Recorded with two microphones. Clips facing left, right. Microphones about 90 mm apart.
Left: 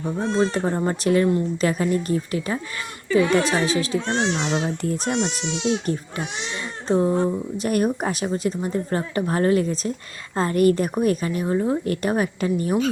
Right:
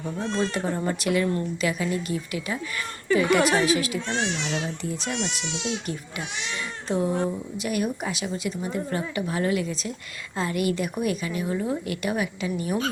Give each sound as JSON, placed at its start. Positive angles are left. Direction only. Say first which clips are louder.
{"t": 0.0, "sound": "speech", "louder": "left 5 dB", "side_deg": 25}
{"t": 4.8, "sound": "speech", "louder": "left 6 dB", "side_deg": 50}
{"t": 5.1, "sound": "speech", "louder": "left 6 dB", "side_deg": 40}
{"t": 7.6, "sound": "speech", "louder": "left 5 dB", "side_deg": 45}